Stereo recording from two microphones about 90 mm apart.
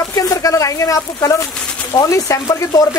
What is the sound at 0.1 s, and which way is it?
Speech, 40° left (ahead or behind).